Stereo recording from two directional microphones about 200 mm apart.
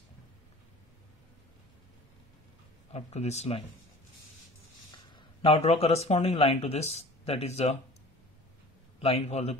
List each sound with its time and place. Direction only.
2.9 s speech: 35° left (ahead or behind)
5.1 s speech: 25° left (ahead or behind)
9.0 s speech: 30° left (ahead or behind)